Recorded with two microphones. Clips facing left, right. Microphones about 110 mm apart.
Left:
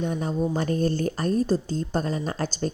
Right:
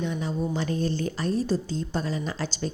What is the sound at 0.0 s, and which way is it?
Speech, 45° left (ahead or behind).